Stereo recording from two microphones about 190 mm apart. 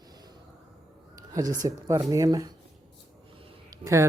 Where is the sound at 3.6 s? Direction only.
15° right (ahead or behind).